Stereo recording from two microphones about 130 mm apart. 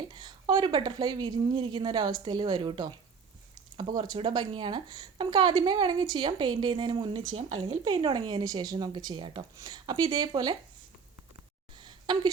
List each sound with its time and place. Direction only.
0.1 s speech: 35° right (ahead or behind)
3.9 s speech: 30° right (ahead or behind)
7.9 s speech: 35° right (ahead or behind)
11.8 s a sound: 35° right (ahead or behind)